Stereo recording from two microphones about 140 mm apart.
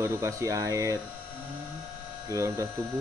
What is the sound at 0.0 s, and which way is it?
Speech, 20° right (ahead or behind).